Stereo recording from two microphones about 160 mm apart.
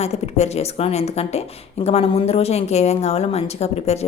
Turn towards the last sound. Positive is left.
turn(degrees=40)  # may be behind; listen again after turning